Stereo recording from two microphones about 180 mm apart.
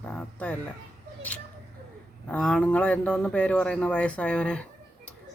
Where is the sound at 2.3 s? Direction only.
5° left (ahead or behind).